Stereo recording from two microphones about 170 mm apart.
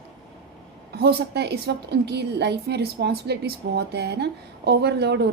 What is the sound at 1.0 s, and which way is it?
A woman's voice, 75° right (ahead or behind).